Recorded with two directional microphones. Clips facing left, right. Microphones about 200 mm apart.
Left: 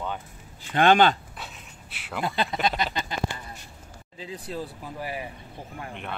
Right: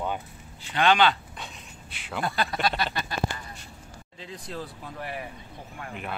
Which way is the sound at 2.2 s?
20° left (ahead or behind).